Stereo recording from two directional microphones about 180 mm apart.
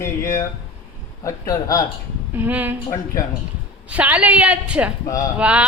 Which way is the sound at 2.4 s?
10° right (ahead or behind).